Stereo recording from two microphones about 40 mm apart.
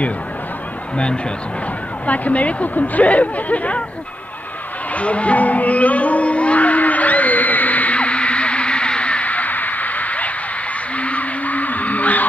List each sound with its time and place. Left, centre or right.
0.9 s speech: left
2.0 s speech: left
4.9 s music: left
11.0 s a sound: left